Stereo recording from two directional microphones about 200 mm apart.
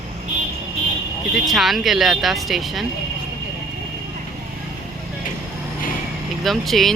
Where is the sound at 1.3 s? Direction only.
Centre (ahead or behind).